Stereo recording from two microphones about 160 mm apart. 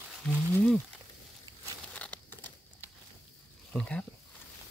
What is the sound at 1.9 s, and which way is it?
Crumpling, 10° left (ahead or behind).